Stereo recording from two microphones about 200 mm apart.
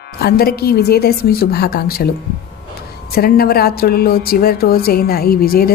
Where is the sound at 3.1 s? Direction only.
50° left (ahead or behind).